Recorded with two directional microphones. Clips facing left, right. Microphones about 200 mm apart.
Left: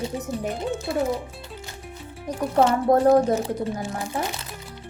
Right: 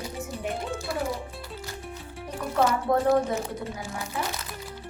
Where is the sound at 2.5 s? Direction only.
30° left (ahead or behind).